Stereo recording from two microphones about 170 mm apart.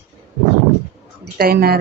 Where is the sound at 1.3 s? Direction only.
65° right (ahead or behind).